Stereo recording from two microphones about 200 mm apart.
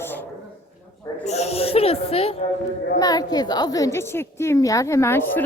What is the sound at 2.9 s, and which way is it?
A woman's voice, 20° left (ahead or behind).